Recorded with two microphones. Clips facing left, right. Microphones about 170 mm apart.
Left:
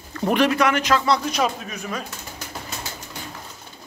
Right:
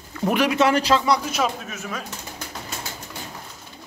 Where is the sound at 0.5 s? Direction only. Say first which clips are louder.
Right 1 dB; 30° right (ahead or behind).